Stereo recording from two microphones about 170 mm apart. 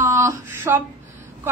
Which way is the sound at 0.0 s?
15° right (ahead or behind).